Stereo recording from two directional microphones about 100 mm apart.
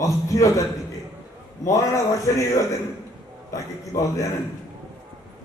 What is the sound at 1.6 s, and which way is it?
Speech, 30° left (ahead or behind).